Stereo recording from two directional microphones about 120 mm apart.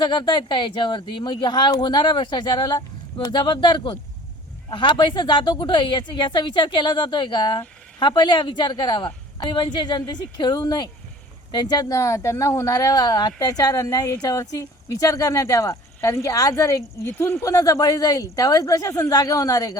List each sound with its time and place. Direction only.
0.0 s speech: 40° left (ahead or behind)